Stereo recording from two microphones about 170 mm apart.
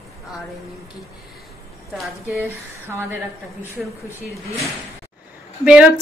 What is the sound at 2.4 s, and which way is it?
Speech, 15° right (ahead or behind).